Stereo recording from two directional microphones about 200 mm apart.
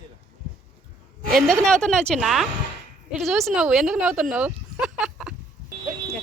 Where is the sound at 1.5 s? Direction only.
5° left (ahead or behind).